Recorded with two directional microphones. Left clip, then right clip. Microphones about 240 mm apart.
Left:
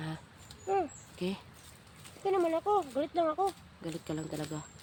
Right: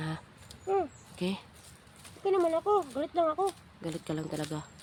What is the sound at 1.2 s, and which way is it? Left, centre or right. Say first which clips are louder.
Speech: right 2 dB; centre.